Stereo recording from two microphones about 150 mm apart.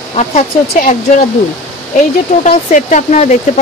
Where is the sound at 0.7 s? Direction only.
65° left (ahead or behind).